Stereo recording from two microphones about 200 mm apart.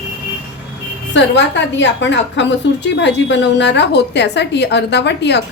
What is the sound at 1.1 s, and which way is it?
A woman's voice, 60° left (ahead or behind).